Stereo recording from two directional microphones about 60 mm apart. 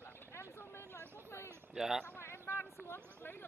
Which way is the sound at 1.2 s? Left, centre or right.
Left.